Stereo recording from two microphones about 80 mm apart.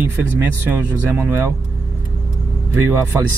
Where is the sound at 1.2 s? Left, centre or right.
Right.